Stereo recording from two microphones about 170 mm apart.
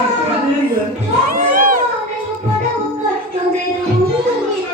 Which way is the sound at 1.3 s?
55° right (ahead or behind).